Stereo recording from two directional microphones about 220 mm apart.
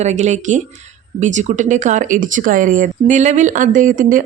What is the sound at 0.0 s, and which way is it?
A woman's voice, 30° right (ahead or behind).